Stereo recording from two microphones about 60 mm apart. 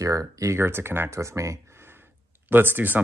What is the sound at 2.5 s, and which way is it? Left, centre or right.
Speech, right.